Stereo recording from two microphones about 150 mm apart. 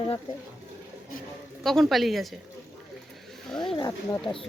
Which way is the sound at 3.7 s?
25° left (ahead or behind).